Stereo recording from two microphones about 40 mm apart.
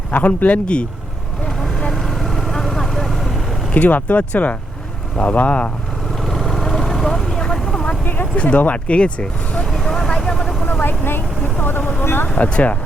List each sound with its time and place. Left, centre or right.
0.1 s speech: left
1.9 s vehicle: centre
3.8 s speech: left
6.2 s vehicle: centre
8.0 s a sound: left
8.4 s speech: left
9.8 s vehicle: centre
10.6 s vehicle: left
12.0 s speech: left
12.4 s speech: left